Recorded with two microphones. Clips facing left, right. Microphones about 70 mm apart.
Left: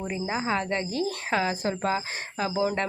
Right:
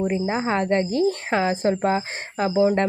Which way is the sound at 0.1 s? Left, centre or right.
Right.